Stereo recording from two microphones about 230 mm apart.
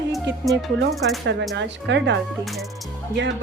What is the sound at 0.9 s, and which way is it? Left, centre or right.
Music, centre.